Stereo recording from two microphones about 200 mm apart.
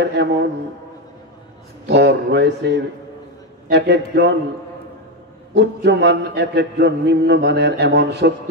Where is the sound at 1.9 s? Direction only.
60° right (ahead or behind).